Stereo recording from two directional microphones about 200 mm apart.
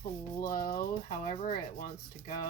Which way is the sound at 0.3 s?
45° left (ahead or behind).